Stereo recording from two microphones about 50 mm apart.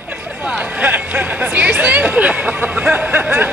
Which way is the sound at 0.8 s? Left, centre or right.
Right.